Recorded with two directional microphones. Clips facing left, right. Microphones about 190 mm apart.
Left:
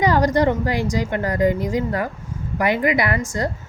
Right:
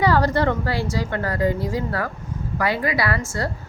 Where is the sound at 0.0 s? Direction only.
15° left (ahead or behind).